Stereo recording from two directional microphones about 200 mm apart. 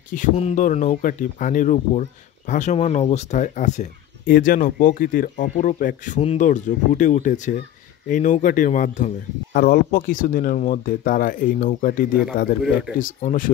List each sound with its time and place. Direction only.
0.1 s speech: 35° left (ahead or behind)